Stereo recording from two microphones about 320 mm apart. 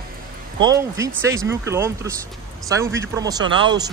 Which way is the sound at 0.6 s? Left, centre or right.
Centre.